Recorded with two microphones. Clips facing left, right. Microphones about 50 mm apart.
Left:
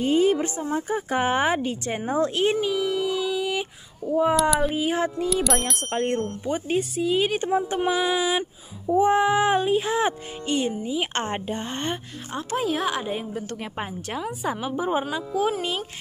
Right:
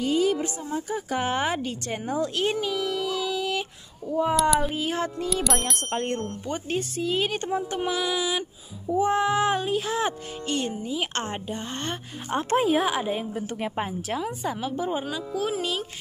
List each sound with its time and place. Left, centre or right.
0.0 s a woman's voice: left
2.3 s a sound: centre
4.4 s speech: centre
4.7 s speech: centre
5.3 s a woman's voice: centre; by 10.6 s left
10.6 s speech: centre
12.3 s speech: right
12.6 s a woman's voice: centre
14.5 s speech: centre